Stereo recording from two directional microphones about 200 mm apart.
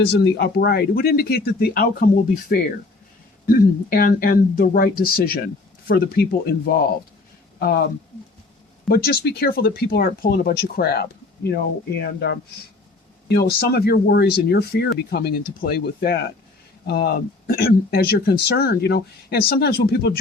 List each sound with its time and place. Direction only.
0.0 s speech: 55° left (ahead or behind)
7.6 s speech: 50° left (ahead or behind)
8.9 s speech: 50° left (ahead or behind)